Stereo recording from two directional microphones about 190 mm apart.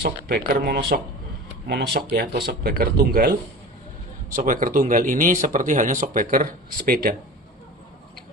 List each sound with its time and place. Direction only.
0.3 s speech: 50° right (ahead or behind)